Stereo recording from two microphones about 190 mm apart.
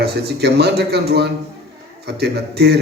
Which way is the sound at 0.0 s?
55° right (ahead or behind).